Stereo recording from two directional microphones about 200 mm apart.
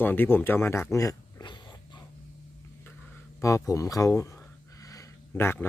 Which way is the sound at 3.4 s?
15° left (ahead or behind).